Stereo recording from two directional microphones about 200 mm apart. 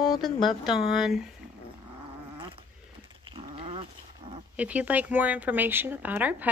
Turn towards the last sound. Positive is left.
turn(degrees=-10)  # may be behind; listen again after turning